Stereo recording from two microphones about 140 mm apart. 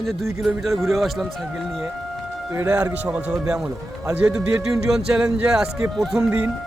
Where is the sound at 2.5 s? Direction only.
10° right (ahead or behind).